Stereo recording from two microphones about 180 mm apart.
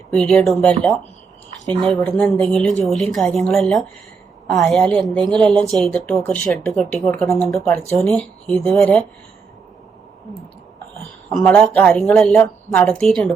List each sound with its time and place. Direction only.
0.1 s speech: 5° left (ahead or behind)
1.7 s speech: 35° right (ahead or behind)
2.0 s speech: 5° left (ahead or behind)
11.0 s speech: 5° left (ahead or behind)